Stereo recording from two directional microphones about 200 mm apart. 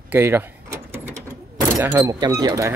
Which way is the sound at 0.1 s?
10° right (ahead or behind).